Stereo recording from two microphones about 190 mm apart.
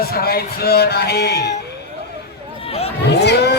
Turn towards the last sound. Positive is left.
turn(degrees=60)  # may be behind; listen again after turning